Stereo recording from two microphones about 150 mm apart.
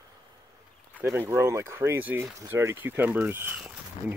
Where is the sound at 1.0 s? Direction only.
15° right (ahead or behind).